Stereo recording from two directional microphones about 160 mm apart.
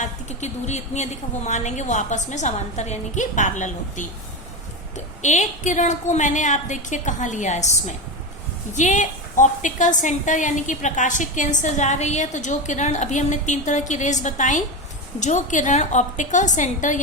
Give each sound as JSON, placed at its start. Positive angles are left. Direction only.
{"t": 0.0, "sound": "a woman's voice", "side_deg": 45}